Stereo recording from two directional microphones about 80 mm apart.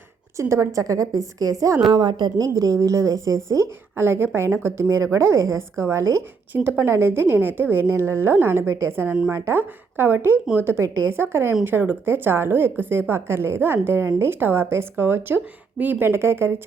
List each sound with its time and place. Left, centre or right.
0.3 s a woman's voice: right
2.0 s a woman's voice: right
6.5 s a woman's voice: right